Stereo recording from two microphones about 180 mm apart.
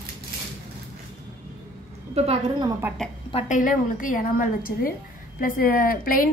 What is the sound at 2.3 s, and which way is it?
Speech, 25° right (ahead or behind).